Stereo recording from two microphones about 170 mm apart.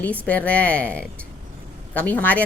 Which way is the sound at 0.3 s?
10° left (ahead or behind).